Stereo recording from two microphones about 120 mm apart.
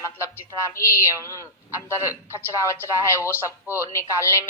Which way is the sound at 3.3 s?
15° right (ahead or behind).